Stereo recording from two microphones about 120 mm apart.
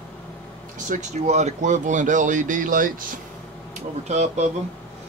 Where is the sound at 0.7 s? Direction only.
80° right.